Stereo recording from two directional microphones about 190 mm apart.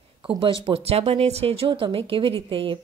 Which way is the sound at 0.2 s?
25° right (ahead or behind).